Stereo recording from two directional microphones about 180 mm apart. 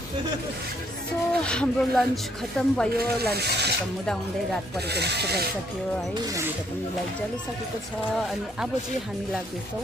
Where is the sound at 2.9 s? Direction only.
60° right (ahead or behind).